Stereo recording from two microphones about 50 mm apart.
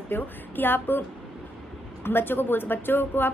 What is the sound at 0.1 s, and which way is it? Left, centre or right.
Speech, left.